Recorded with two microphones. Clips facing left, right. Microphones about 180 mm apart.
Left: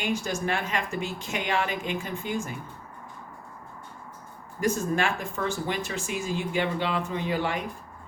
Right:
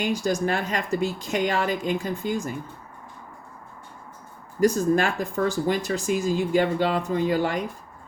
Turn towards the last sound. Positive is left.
turn(degrees=-40)  # may be behind; listen again after turning